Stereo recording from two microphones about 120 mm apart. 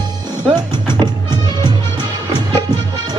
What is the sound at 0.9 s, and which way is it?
Music, 40° right (ahead or behind).